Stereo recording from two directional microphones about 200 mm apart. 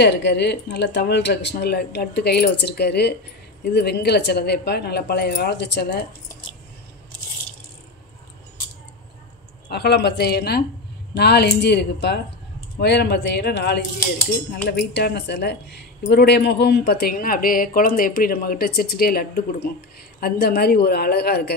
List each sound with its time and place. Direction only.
0.0 s speech: 60° left (ahead or behind)
9.7 s a woman's voice: 55° left (ahead or behind)